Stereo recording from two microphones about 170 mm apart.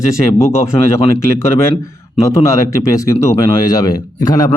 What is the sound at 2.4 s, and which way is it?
Speech, 20° left (ahead or behind).